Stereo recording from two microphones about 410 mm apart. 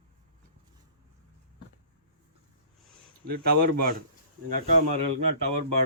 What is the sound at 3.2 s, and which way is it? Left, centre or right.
Speech, right.